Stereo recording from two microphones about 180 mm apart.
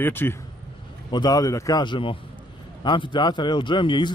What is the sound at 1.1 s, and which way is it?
A man's voice, 25° left (ahead or behind).